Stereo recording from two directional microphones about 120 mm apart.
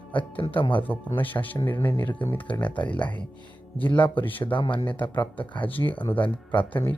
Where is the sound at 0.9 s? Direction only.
15° left (ahead or behind).